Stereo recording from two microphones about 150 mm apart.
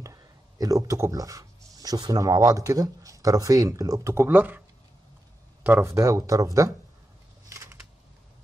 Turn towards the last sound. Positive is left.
turn(degrees=-20)  # may be behind; listen again after turning